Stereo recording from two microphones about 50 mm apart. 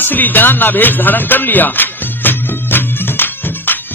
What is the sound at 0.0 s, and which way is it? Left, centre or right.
Music, left.